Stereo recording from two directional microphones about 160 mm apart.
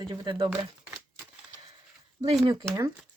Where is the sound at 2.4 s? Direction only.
30° right (ahead or behind).